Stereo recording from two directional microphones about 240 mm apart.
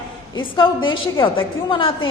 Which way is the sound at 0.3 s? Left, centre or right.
Centre.